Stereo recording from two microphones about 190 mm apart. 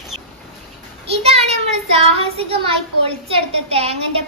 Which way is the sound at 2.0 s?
30° right (ahead or behind).